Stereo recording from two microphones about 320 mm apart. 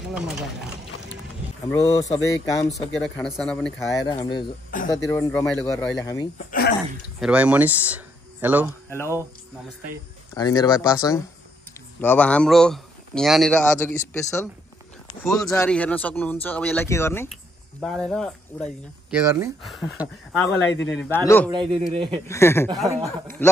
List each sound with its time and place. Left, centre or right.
0.1 s speech: centre
1.7 s speech: centre
4.0 s speech: centre
4.7 s speech: left
5.1 s speech: centre
6.3 s speech: left
7.2 s speech: centre
8.9 s speech: centre
10.3 s speech: centre
21.5 s a man's voice: centre
22.3 s speech: centre
22.8 s a man's voice: centre
23.4 s a man's voice: centre